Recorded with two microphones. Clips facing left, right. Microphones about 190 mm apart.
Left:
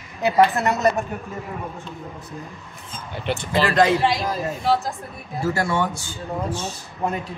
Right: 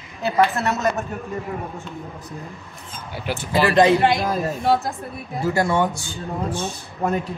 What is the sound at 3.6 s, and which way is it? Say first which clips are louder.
Speech: right 3 dB; 15° right (ahead or behind).